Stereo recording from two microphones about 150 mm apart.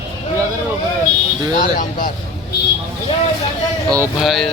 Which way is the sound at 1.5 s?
65° left (ahead or behind).